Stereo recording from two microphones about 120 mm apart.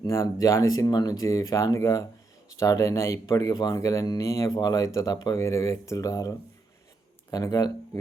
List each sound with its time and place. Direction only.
0.1 s speech: 25° left (ahead or behind)